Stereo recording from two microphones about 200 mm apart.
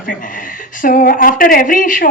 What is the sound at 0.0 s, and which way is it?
A woman's voice, 45° left (ahead or behind).